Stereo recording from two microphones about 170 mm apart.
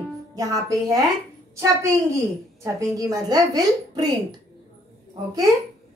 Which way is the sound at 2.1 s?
20° right (ahead or behind).